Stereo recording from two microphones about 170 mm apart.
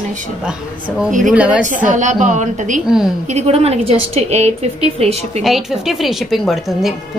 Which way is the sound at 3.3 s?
40° right (ahead or behind).